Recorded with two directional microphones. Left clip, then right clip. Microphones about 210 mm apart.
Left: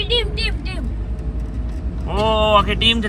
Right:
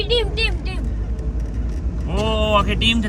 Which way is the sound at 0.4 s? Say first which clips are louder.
Right 1 dB; 50° right (ahead or behind).